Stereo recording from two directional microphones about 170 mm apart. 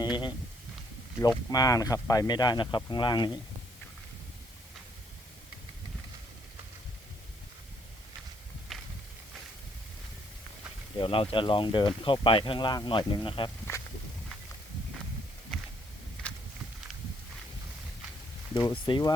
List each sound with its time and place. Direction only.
0.0 s a sound: 25° left (ahead or behind)
1.5 s speech: 20° left (ahead or behind)
8.7 s walk: centre (ahead or behind)
10.9 s speech: 30° left (ahead or behind)
16.2 s walk: 5° left (ahead or behind)
18.5 s speech: 30° left (ahead or behind)